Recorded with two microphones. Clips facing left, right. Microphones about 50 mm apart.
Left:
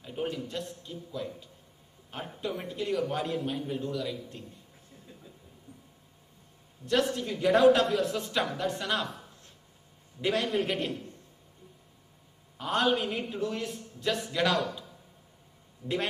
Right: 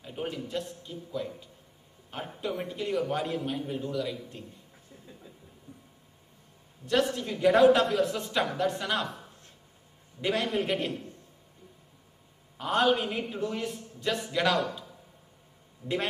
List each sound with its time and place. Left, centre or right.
0.0 s a sound: centre
0.5 s a woman's voice: centre
6.9 s a woman's voice: centre
10.2 s a woman's voice: centre
12.5 s a woman's voice: centre